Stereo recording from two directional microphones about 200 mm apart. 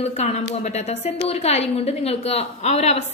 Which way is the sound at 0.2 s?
35° left (ahead or behind).